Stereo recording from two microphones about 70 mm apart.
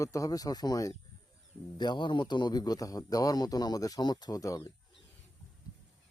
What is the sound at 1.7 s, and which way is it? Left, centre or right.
A man's voice, left.